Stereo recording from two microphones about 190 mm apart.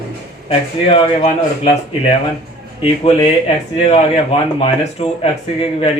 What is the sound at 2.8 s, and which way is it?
Speech, 30° left (ahead or behind).